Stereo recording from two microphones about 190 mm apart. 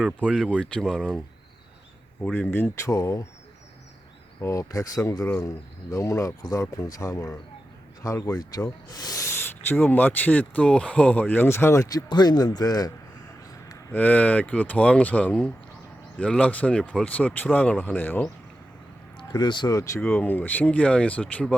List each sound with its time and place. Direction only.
0.3 s speech: 5° right (ahead or behind)
2.2 s speech: 5° left (ahead or behind)
4.4 s speech: 15° left (ahead or behind)
13.7 s speech: 10° left (ahead or behind)
19.1 s speech: 25° left (ahead or behind); by 21.5 s 5° left (ahead or behind)